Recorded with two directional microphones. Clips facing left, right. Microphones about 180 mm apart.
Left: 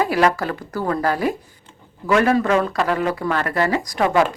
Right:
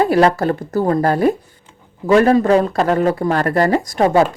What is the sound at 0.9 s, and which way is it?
Speech, 40° right (ahead or behind).